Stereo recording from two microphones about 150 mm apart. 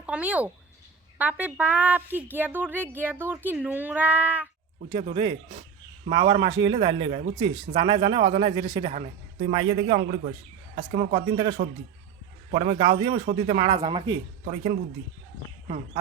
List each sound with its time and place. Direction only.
0.0 s a woman's voice: 10° right (ahead or behind)
4.9 s a man's voice: 35° right (ahead or behind)
10.8 s a man's voice: 90° right
11.1 s a man's voice: 30° right (ahead or behind)
12.5 s a man's voice: 35° right (ahead or behind)
14.4 s speech: 50° right (ahead or behind)